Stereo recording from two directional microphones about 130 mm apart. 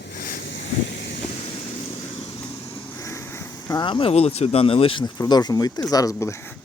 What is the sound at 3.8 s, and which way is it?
Speech, 45° left (ahead or behind).